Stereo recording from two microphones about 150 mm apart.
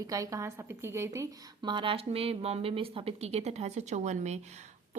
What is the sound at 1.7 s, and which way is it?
A woman's voice, 35° right (ahead or behind).